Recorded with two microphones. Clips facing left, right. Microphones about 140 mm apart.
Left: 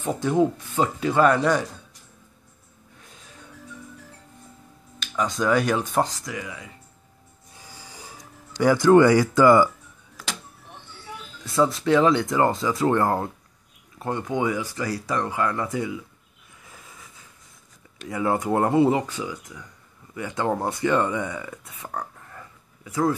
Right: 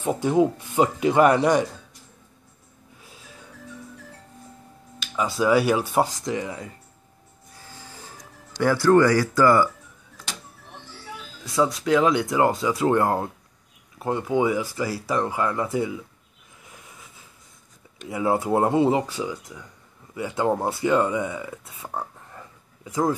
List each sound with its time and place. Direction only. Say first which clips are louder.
0.0 s speech: right 1 dB; 15° right (ahead or behind)
3.0 s music: right 1 dB; 5° right (ahead or behind)
5.0 s speech: right 1 dB; 5° right (ahead or behind)
6.2 s speech: right 6 dB; 30° right (ahead or behind)
7.5 s music: right 1 dB; 10° left (ahead or behind)
11.4 s speech: left 1 dB; centre (ahead or behind); by 15.7 s 15° right (ahead or behind)
18.0 s speech: right 1 dB; 10° right (ahead or behind)
22.8 s speech: even; 15° right (ahead or behind)